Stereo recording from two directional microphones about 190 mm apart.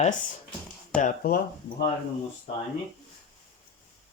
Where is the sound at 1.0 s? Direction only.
50° left (ahead or behind).